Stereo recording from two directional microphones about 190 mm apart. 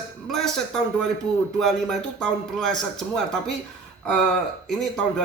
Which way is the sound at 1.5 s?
Centre (ahead or behind).